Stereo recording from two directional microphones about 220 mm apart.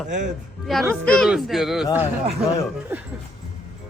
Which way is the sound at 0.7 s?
Centre (ahead or behind).